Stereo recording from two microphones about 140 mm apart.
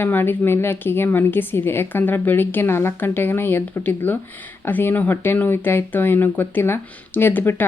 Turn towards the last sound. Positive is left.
turn(degrees=15)  # may be behind; listen again after turning